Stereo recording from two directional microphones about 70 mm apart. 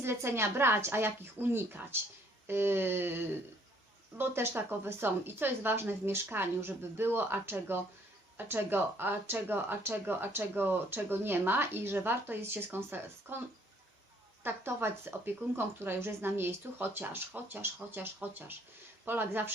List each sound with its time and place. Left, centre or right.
0.0 s speech: right